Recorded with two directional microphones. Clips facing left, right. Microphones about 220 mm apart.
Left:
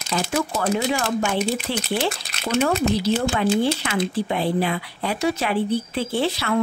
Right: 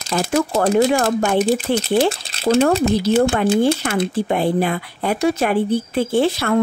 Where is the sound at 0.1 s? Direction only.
50° right (ahead or behind); by 2.8 s 35° right (ahead or behind).